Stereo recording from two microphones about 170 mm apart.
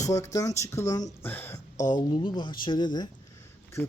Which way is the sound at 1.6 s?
45° left (ahead or behind).